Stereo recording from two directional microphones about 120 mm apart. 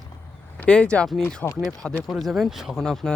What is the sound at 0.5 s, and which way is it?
Speech, 10° left (ahead or behind).